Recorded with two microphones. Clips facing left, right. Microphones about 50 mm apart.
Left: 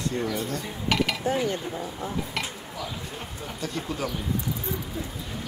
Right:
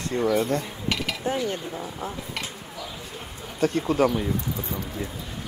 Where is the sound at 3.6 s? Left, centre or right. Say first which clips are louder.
Right 10 dB; right.